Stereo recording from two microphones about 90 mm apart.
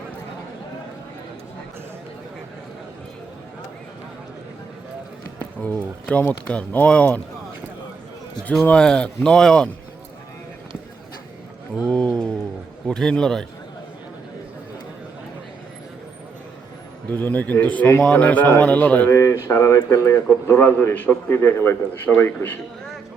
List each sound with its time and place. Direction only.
5.6 s speech: 15° left (ahead or behind)
8.6 s speech: 10° left (ahead or behind)
11.8 s a sound: 10° left (ahead or behind)
12.9 s a man's voice: 10° left (ahead or behind)
17.1 s a man's voice: 20° left (ahead or behind)
19.1 s a man's voice: 30° left (ahead or behind)